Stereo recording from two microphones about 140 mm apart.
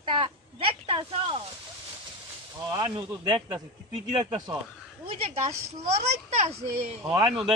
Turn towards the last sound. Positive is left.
turn(degrees=0)  # may be behind; listen again after turning